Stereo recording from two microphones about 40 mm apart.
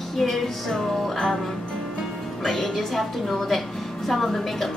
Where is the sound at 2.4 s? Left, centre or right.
Centre.